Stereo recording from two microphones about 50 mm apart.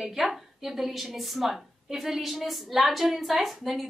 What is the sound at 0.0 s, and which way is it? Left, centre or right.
A woman's voice, centre.